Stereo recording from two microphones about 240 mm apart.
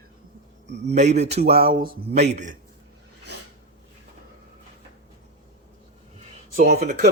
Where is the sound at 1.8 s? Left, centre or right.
Right.